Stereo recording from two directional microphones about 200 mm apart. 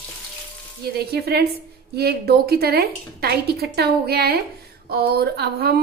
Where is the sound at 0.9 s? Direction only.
55° right (ahead or behind).